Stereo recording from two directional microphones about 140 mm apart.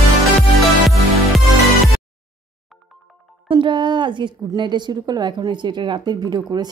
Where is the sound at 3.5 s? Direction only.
35° right (ahead or behind).